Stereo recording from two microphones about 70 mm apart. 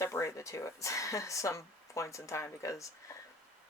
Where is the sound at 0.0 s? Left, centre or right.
Left.